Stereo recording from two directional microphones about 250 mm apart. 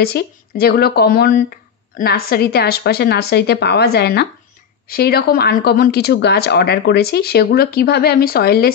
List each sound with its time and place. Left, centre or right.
0.0 s speech: left